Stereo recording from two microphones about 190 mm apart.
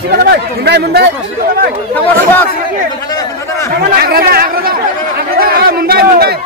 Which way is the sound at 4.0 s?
55° right (ahead or behind).